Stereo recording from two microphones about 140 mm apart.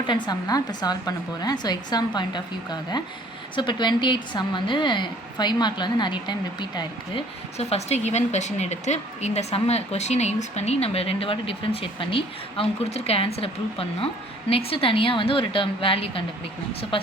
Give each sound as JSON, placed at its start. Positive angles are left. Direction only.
{"t": 0.1, "sound": "a woman's voice", "side_deg": 30}